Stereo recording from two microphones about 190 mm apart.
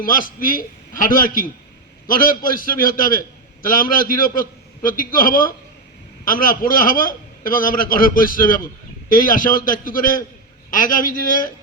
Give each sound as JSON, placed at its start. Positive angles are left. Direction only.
{"t": 0.0, "sound": "a man's voice", "side_deg": 45}